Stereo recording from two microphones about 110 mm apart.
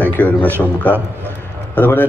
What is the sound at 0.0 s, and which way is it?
A man's voice, 15° left (ahead or behind).